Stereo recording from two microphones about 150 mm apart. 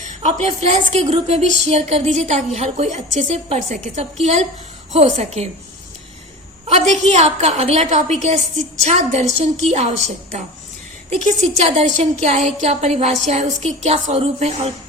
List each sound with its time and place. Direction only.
0.0 s a woman's voice: 50° right (ahead or behind)
6.9 s a woman's voice: 50° right (ahead or behind)